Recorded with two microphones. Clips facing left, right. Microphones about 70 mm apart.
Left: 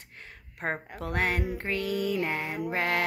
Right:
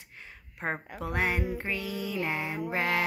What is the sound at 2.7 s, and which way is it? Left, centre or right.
Music, left.